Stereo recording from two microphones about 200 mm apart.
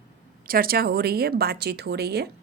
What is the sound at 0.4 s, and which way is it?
A woman's voice, 45° right (ahead or behind).